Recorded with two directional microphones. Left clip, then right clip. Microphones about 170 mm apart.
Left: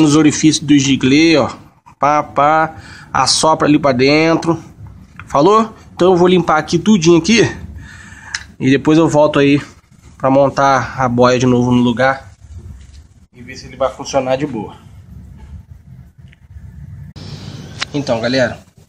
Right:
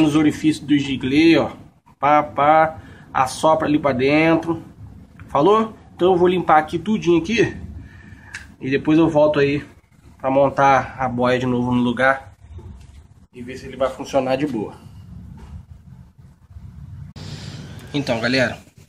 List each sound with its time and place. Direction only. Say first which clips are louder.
0.0 s speech: left 6 dB; 60° left (ahead or behind)
8.5 s speech: left 6 dB; 60° left (ahead or behind); by 12.2 s 40° left (ahead or behind)
13.7 s speech: left 5 dB; 20° left (ahead or behind)
17.9 s speech: left 4 dB; centre (ahead or behind)